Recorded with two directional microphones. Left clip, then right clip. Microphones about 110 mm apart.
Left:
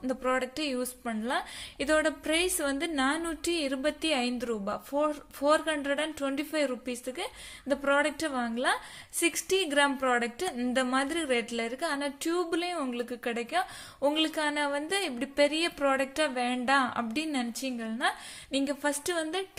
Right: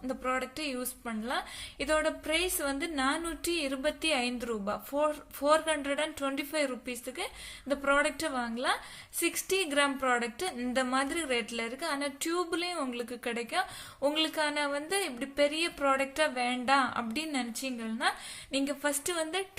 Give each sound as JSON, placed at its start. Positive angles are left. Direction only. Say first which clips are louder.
{"t": 0.0, "sound": "a woman's voice", "louder": "left 3 dB", "side_deg": 40}